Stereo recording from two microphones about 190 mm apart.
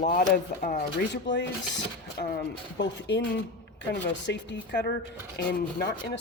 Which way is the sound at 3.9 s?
65° left (ahead or behind).